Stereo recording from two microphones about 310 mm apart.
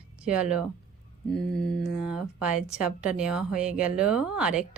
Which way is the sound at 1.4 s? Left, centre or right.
Left.